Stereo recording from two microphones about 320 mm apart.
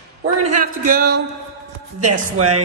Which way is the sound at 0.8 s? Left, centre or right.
Right.